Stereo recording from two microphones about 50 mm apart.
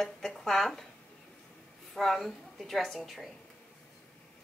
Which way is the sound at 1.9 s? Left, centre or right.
Centre.